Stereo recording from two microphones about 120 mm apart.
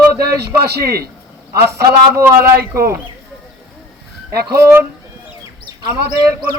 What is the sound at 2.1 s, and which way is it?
Speech, 20° right (ahead or behind).